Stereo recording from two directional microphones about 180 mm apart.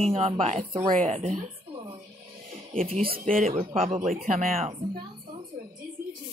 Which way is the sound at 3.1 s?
50° right (ahead or behind).